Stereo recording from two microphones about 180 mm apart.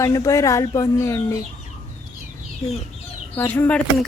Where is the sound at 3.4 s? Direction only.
10° left (ahead or behind).